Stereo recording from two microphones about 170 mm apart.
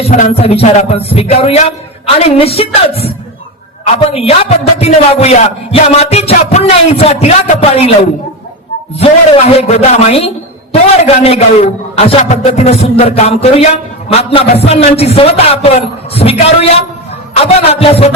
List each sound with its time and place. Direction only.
0.0 s a man's voice: 40° left (ahead or behind)
9.0 s a man's voice: 35° left (ahead or behind)